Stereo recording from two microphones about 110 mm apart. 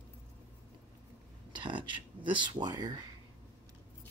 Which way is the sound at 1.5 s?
45° right (ahead or behind).